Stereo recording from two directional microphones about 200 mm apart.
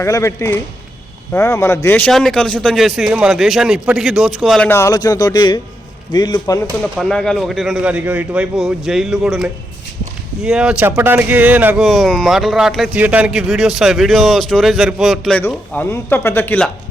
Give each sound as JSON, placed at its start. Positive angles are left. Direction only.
{"t": 0.0, "sound": "speech", "side_deg": 15}
{"t": 6.9, "sound": "speech", "side_deg": 0}
{"t": 11.8, "sound": "speech", "side_deg": 0}